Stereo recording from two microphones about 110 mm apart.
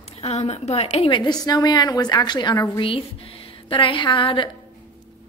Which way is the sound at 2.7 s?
55° left (ahead or behind).